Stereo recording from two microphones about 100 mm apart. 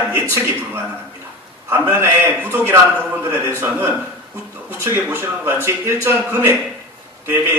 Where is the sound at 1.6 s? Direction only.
20° right (ahead or behind).